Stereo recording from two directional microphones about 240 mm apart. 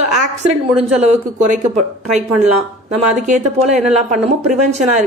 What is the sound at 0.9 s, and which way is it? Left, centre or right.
Speech, right.